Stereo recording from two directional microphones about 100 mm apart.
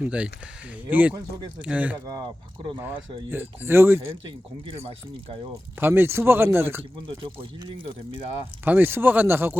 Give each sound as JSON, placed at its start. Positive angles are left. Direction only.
{"t": 0.0, "sound": "speech", "side_deg": -15}
{"t": 1.1, "sound": "speech", "side_deg": -45}
{"t": 1.6, "sound": "speech", "side_deg": -15}
{"t": 5.8, "sound": "speech", "side_deg": -20}
{"t": 8.6, "sound": "speech", "side_deg": -20}